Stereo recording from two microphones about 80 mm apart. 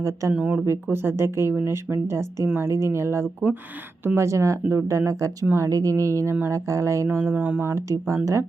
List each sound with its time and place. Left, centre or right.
0.0 s speech: right
0.3 s speech: centre
0.6 s speech: right
7.3 s speech: centre
7.9 s speech: right